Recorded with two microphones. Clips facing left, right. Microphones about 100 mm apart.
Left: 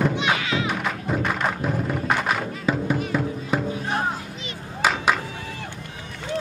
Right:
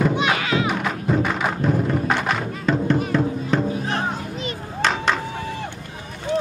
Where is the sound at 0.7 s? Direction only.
Centre (ahead or behind).